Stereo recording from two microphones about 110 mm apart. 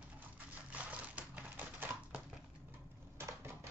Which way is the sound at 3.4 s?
25° right (ahead or behind).